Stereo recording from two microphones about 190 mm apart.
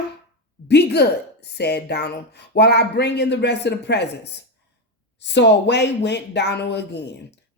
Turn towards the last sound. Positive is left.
turn(degrees=65)  # may be behind; listen again after turning